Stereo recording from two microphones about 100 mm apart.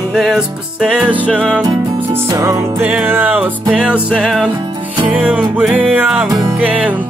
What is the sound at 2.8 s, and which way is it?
Music, 10° right (ahead or behind).